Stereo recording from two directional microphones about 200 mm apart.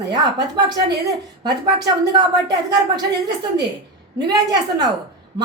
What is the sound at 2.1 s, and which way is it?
A woman's voice, 20° right (ahead or behind).